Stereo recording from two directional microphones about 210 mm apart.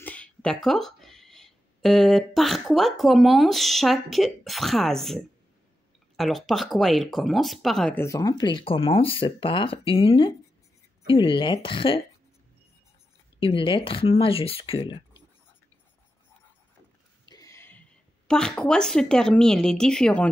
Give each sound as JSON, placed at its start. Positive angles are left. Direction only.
{"t": 0.0, "sound": "speech", "side_deg": 5}
{"t": 13.4, "sound": "speech", "side_deg": 25}
{"t": 17.3, "sound": "speech", "side_deg": 15}